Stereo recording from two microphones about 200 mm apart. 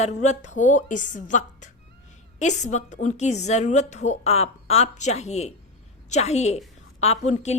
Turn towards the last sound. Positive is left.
turn(degrees=35)  # may be behind; listen again after turning